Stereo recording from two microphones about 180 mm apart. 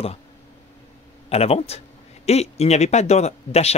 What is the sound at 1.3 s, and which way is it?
Speech, 35° left (ahead or behind).